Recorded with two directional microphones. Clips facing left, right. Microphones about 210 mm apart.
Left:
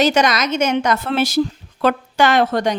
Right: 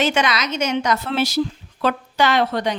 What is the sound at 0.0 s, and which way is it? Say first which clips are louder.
A woman's voice: left 4 dB; 40° left (ahead or behind).